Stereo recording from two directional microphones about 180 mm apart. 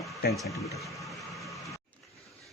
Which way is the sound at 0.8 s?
Centre (ahead or behind).